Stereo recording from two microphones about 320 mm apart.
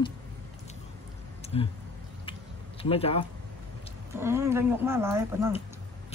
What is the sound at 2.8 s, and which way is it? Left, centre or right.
Speech, centre.